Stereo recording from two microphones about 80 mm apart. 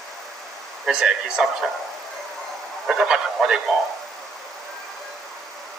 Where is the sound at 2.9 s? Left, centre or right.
Centre.